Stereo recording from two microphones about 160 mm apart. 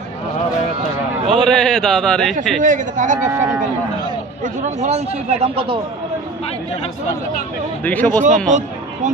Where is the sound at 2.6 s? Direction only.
55° right (ahead or behind).